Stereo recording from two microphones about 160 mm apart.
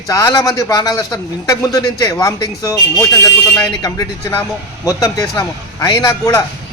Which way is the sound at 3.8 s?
20° left (ahead or behind).